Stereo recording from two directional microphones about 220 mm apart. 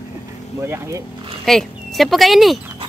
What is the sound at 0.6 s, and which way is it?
Speech, 10° right (ahead or behind).